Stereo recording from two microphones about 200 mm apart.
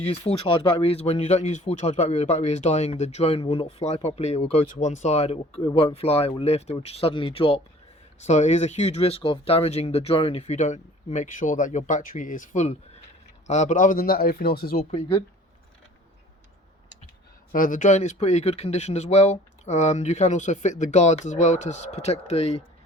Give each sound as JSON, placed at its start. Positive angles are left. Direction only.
{"t": 0.0, "sound": "speech", "side_deg": 30}
{"t": 14.8, "sound": "speech", "side_deg": 30}
{"t": 17.5, "sound": "speech", "side_deg": 40}